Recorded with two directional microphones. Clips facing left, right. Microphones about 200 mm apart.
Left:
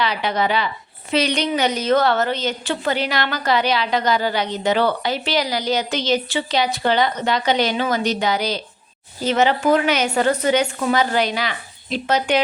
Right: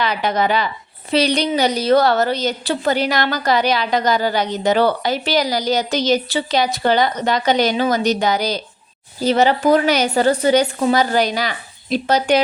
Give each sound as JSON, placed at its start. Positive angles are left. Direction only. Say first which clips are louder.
{"t": 0.0, "sound": "a woman's voice", "louder": "right 2 dB", "side_deg": -45}